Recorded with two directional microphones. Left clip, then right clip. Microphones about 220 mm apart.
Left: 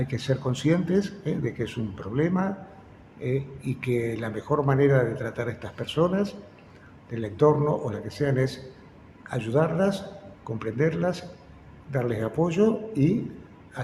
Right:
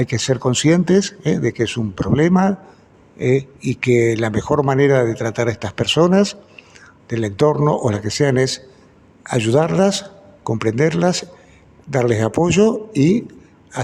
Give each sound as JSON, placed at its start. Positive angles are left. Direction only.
{"t": 0.0, "sound": "speech", "side_deg": -45}